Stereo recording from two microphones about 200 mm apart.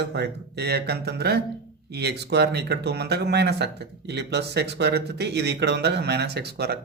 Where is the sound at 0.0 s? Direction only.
55° right (ahead or behind).